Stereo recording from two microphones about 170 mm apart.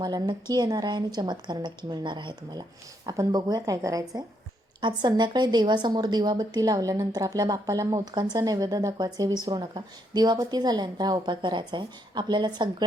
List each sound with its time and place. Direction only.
0.0 s a woman's voice: 25° right (ahead or behind)